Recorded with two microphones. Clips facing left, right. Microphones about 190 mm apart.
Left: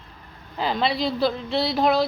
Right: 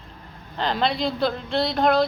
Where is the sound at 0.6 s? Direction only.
5° left (ahead or behind).